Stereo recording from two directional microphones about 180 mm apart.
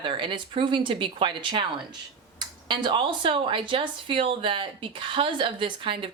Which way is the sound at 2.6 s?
25° right (ahead or behind).